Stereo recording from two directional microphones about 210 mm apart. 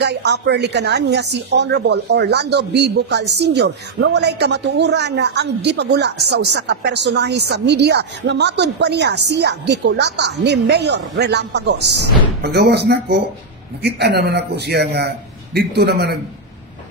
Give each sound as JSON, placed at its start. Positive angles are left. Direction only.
{"t": 0.0, "sound": "a woman's voice", "side_deg": -55}